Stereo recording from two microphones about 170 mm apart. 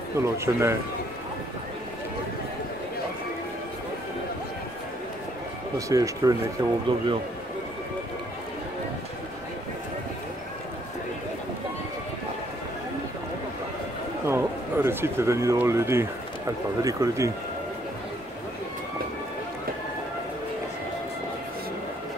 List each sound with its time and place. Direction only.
0.2 s speech: 15° right (ahead or behind)
5.8 s speech: 20° right (ahead or behind)
14.2 s speech: 15° right (ahead or behind)